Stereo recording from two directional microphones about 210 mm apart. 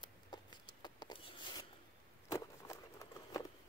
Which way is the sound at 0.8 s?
20° left (ahead or behind).